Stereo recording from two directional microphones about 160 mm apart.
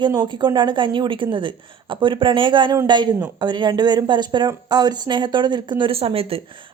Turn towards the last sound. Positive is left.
turn(degrees=-35)  # may be behind; listen again after turning